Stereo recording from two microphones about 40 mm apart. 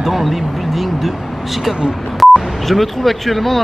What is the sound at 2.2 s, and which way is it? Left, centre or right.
Speech, centre.